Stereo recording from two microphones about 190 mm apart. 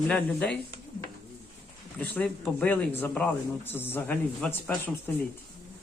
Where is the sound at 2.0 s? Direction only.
10° left (ahead or behind).